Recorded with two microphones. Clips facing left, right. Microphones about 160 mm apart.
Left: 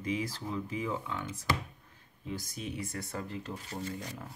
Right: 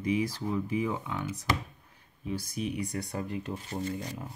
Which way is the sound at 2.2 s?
15° right (ahead or behind).